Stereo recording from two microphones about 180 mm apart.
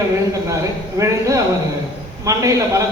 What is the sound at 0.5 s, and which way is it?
Speech, 15° right (ahead or behind).